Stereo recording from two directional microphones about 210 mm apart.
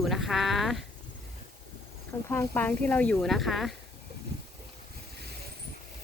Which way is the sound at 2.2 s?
10° left (ahead or behind).